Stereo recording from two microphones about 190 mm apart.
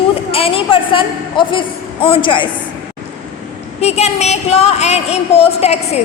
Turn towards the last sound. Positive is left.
turn(degrees=35)  # may be behind; listen again after turning